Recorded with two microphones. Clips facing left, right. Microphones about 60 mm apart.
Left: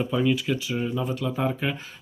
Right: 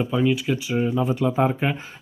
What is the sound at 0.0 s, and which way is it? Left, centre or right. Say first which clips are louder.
Speech: right 2 dB; centre.